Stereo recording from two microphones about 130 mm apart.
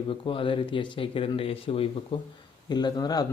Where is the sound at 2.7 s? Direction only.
30° left (ahead or behind).